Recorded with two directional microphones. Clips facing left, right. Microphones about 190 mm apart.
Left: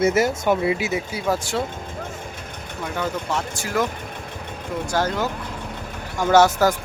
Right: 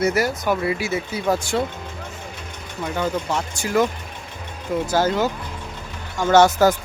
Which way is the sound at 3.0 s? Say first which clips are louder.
Right 2 dB; centre (ahead or behind).